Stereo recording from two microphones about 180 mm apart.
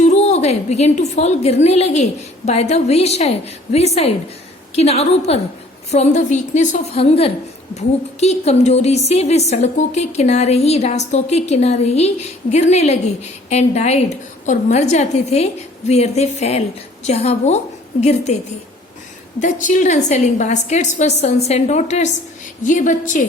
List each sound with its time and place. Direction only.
0.0 s a woman's voice: 40° left (ahead or behind)
19.4 s a woman's voice: 45° left (ahead or behind)